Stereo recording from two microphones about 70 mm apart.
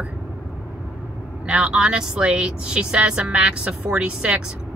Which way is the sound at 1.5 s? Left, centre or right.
Centre.